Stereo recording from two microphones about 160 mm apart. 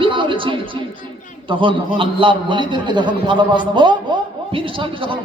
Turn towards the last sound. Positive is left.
turn(degrees=-30)  # may be behind; listen again after turning